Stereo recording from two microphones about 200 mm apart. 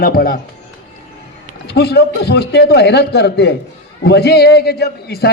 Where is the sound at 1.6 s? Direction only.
55° left (ahead or behind).